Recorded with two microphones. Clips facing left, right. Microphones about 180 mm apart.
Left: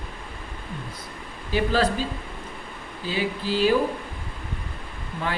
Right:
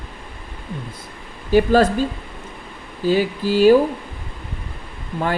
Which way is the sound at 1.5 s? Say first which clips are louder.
Right 8 dB; 45° right (ahead or behind).